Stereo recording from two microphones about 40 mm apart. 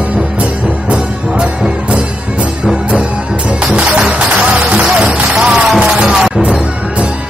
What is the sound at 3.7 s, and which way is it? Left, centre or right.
Music, right.